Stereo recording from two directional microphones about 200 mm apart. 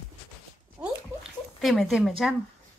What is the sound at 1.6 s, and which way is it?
Speech, centre (ahead or behind).